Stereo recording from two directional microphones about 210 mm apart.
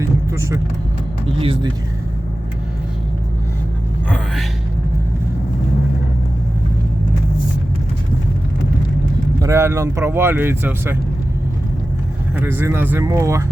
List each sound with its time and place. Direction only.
0.0 s vehicle: 15° right (ahead or behind)
1.4 s speech: 25° right (ahead or behind)
9.4 s speech: 15° right (ahead or behind)
12.4 s speech: 10° right (ahead or behind)